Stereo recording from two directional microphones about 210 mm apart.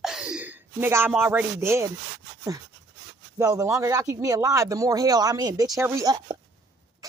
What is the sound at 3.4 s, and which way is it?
Speech, 15° right (ahead or behind).